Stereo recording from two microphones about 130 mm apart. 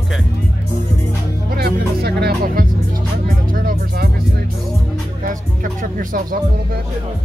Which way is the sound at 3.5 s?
90° right.